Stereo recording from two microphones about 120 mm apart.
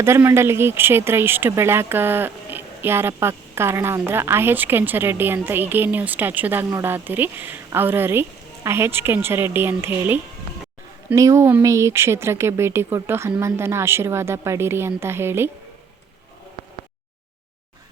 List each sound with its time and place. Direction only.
0.0 s speech: 20° right (ahead or behind)